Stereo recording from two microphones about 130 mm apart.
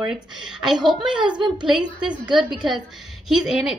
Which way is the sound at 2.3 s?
35° right (ahead or behind).